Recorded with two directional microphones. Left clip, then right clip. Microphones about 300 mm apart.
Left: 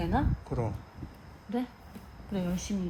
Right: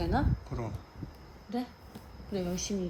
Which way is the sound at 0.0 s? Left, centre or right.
Left.